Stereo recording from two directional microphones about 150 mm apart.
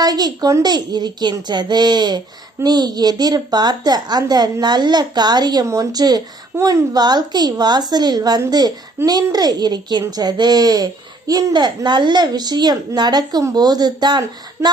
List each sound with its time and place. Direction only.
0.0 s speech: 25° right (ahead or behind)